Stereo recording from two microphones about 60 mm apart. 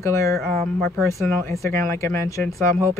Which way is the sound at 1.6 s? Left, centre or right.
Left.